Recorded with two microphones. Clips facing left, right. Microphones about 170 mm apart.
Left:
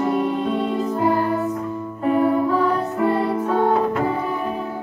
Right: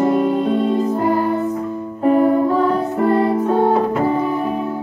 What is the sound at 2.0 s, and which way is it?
Music, 40° right (ahead or behind).